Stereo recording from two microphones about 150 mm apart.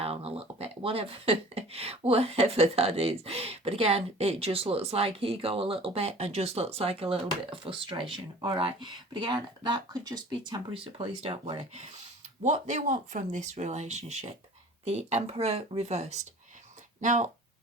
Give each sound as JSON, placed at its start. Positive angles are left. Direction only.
{"t": 0.0, "sound": "speech", "side_deg": -40}
{"t": 12.4, "sound": "speech", "side_deg": -55}